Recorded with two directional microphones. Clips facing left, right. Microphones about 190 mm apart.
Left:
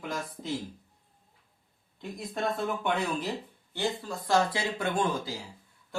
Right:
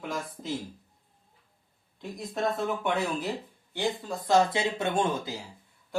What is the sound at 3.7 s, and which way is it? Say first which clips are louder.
Speech: right 1 dB; 20° right (ahead or behind).